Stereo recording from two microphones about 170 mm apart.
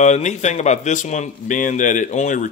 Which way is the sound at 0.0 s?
45° left (ahead or behind).